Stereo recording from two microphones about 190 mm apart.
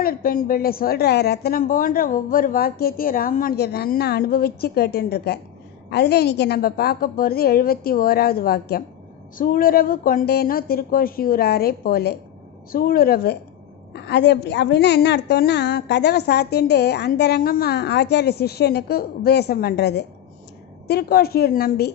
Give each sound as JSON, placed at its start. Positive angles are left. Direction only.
{"t": 0.0, "sound": "a woman's voice", "side_deg": 50}